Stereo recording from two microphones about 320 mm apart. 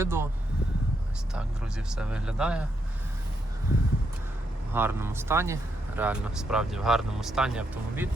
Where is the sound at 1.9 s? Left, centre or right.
Centre.